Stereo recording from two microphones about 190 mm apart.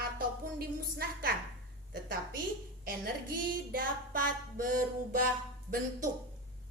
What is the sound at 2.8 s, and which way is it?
Speech, 50° right (ahead or behind).